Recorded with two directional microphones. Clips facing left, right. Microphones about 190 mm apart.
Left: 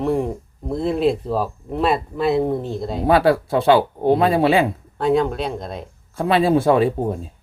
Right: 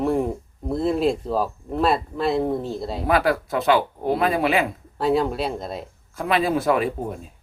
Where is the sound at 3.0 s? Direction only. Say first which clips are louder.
Left 5 dB; 30° left (ahead or behind).